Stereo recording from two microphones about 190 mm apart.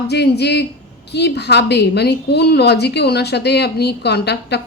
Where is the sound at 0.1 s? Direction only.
60° left (ahead or behind).